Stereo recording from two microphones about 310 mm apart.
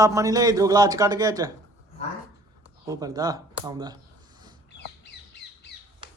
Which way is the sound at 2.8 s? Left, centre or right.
Centre.